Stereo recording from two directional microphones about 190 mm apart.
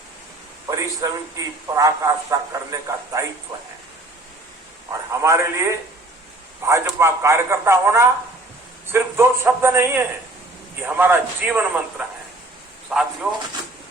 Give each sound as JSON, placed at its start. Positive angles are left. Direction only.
{"t": 0.7, "sound": "a man's voice", "side_deg": -15}
{"t": 4.9, "sound": "a man's voice", "side_deg": -15}